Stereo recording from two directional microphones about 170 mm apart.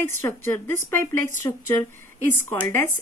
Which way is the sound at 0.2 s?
15° left (ahead or behind).